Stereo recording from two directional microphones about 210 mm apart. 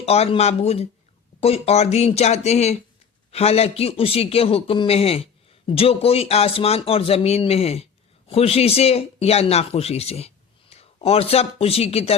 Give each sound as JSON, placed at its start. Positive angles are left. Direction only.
{"t": 0.0, "sound": "a man's voice", "side_deg": 30}